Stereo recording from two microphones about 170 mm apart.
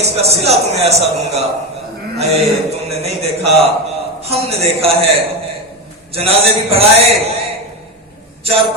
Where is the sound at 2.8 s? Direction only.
35° right (ahead or behind).